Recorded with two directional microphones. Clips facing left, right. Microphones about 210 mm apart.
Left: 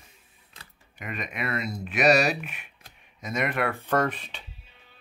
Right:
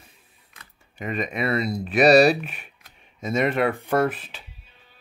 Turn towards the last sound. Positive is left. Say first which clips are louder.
# right 4 dB
turn(degrees=-5)  # may be behind; listen again after turning